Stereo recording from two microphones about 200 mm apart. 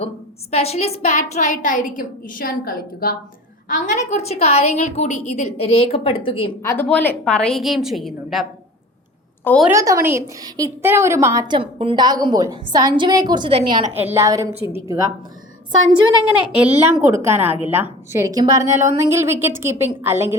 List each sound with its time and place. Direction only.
0.5 s a woman's voice: 30° left (ahead or behind)
6.6 s a woman's voice: 10° left (ahead or behind)
9.6 s a woman's voice: 15° right (ahead or behind)
13.9 s a woman's voice: 10° right (ahead or behind)
16.6 s a woman's voice: 10° right (ahead or behind)